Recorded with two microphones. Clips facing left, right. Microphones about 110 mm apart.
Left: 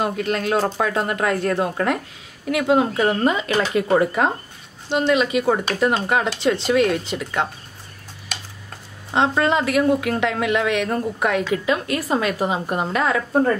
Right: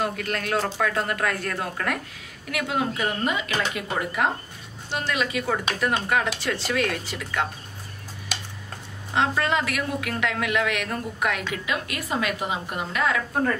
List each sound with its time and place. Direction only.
0.0 s a woman's voice: 25° left (ahead or behind)
4.9 s a woman's voice: 25° left (ahead or behind)
9.1 s a woman's voice: 25° left (ahead or behind)